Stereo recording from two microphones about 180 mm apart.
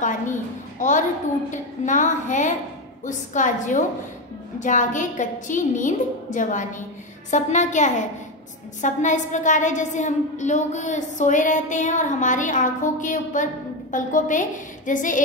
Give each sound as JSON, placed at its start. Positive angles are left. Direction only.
{"t": 0.0, "sound": "a woman's voice", "side_deg": 45}